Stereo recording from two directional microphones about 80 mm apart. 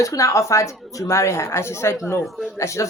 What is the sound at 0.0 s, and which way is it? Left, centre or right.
A woman's voice, left.